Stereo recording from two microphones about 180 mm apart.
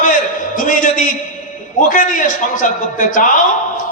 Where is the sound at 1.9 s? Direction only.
50° left (ahead or behind).